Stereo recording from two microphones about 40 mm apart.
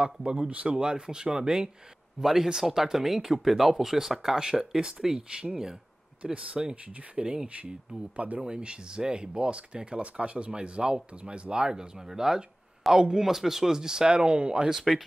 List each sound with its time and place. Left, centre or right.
0.0 s speech: right
2.2 s speech: centre
6.3 s speech: right
8.4 s speech: right
14.8 s speech: centre